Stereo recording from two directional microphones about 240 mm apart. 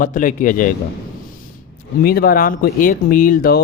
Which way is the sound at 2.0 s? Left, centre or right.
Left.